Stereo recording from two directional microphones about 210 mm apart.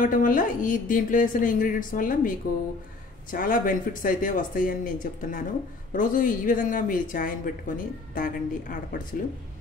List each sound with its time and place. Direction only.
0.0 s speech: 40° left (ahead or behind)